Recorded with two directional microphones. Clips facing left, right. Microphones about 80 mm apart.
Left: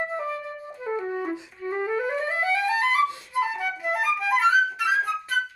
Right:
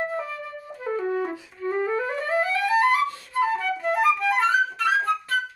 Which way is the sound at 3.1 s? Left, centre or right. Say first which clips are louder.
Right 3 dB; centre.